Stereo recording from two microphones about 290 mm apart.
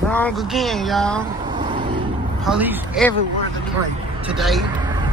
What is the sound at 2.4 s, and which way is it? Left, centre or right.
Speech, centre.